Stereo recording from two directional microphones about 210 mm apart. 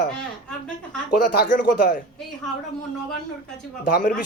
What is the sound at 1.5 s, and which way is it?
Speech, 40° left (ahead or behind).